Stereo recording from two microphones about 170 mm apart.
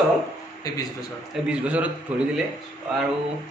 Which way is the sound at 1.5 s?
10° right (ahead or behind).